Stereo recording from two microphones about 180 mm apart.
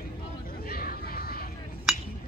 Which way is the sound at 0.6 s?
55° left (ahead or behind).